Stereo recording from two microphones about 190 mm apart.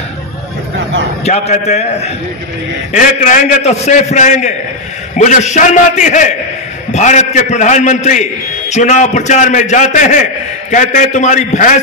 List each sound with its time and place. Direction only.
1.2 s a man's voice: 35° left (ahead or behind)